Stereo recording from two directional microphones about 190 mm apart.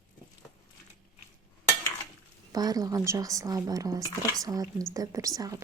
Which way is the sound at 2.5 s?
20° right (ahead or behind).